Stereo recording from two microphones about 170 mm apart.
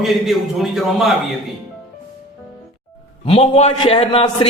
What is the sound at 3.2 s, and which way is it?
A man's voice, 35° left (ahead or behind).